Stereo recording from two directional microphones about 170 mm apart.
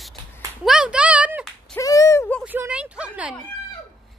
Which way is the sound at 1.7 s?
20° left (ahead or behind).